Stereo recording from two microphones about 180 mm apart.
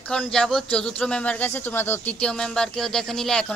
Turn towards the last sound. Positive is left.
turn(degrees=5)  # may be behind; listen again after turning